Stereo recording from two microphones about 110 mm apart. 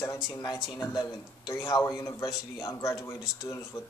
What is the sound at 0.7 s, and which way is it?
Speech, 40° left (ahead or behind).